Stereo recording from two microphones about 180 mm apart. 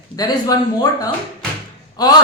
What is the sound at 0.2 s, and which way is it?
Speech, 20° left (ahead or behind).